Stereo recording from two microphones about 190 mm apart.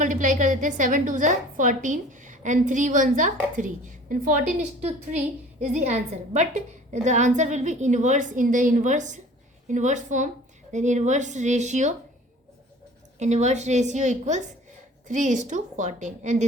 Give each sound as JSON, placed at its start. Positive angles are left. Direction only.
{"t": 0.0, "sound": "a woman's voice", "side_deg": -45}
{"t": 13.1, "sound": "a woman's voice", "side_deg": -35}